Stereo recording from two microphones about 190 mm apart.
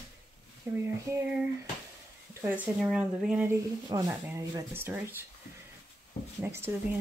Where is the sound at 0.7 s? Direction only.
15° right (ahead or behind).